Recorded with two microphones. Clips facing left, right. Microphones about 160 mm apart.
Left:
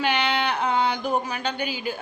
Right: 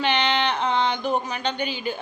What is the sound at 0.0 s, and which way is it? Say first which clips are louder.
Speech: right 1 dB; 10° left (ahead or behind).